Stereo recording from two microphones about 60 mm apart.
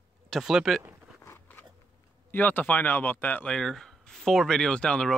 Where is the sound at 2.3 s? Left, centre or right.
Left.